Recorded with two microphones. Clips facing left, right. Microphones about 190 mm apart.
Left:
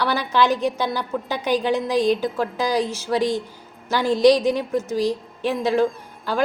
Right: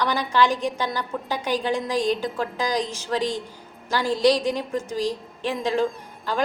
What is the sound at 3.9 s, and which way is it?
Speech, 10° right (ahead or behind).